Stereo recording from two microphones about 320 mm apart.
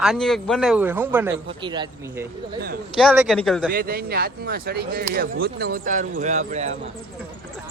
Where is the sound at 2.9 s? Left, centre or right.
Centre.